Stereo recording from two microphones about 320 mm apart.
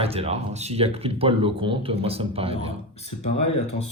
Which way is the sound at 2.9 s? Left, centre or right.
Centre.